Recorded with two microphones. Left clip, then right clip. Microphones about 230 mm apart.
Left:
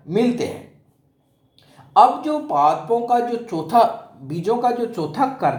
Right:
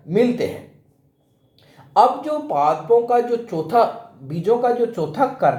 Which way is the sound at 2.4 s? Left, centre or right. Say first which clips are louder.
Left 1 dB; left.